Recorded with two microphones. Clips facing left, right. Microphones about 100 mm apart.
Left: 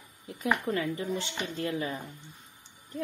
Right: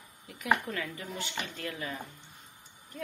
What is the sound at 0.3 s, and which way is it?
Speech, 25° left (ahead or behind).